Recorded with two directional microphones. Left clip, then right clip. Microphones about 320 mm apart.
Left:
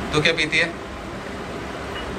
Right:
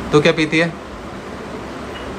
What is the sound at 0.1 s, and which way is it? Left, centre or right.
Speech, centre.